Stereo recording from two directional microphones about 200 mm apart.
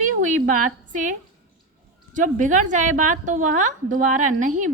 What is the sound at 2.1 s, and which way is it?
A woman's voice, 40° right (ahead or behind).